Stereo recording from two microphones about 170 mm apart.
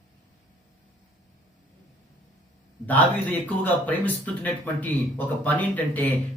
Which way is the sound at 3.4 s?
10° left (ahead or behind).